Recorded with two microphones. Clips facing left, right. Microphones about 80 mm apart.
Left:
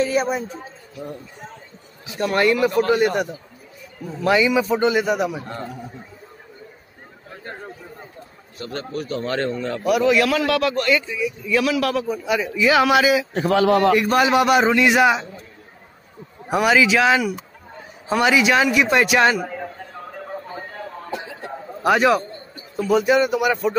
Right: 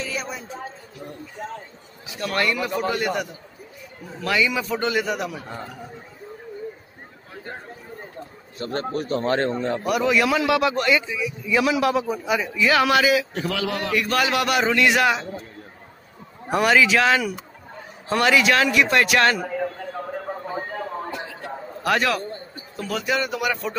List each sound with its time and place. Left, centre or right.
0.0 s a sound: left
2.1 s a man's voice: left
4.2 s a man's voice: left
8.5 s a man's voice: right
9.8 s speech: centre
10.5 s a man's voice: centre
12.5 s a man's voice: centre
13.3 s a man's voice: left
14.0 s a man's voice: centre
16.4 s a man's voice: centre
20.4 s a sound: centre
21.9 s a man's voice: centre